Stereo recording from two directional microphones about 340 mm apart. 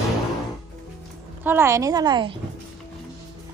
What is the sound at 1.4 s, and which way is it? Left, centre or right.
Speech, centre.